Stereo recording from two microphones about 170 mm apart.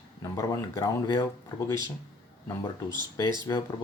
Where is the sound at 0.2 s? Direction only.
20° left (ahead or behind).